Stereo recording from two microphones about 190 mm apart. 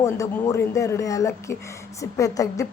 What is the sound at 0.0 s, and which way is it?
Speech, 15° left (ahead or behind).